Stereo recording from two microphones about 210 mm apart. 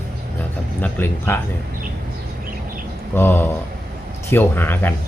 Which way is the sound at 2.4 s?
40° right (ahead or behind).